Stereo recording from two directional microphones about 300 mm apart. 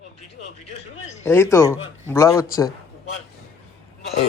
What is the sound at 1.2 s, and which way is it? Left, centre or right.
A man's voice, centre.